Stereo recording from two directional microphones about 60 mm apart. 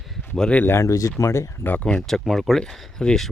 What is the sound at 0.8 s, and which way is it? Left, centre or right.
Speech, left.